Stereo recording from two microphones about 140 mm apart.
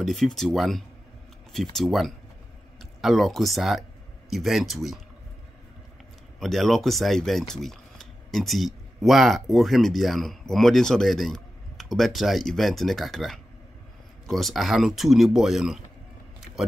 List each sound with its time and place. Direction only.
0.0 s speech: centre (ahead or behind)
6.4 s speech: centre (ahead or behind)